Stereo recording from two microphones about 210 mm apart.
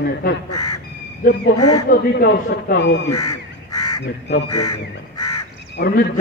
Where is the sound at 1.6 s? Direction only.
90° left.